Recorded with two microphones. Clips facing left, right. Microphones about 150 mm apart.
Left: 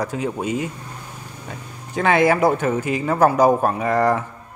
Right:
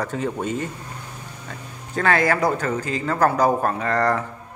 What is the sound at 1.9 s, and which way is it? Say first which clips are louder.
A man's voice: left 3 dB; 20° left (ahead or behind).